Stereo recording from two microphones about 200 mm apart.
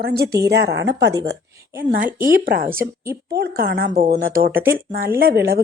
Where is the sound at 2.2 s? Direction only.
45° right (ahead or behind).